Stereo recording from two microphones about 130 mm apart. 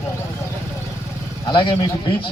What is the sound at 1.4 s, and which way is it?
Speech, 40° left (ahead or behind).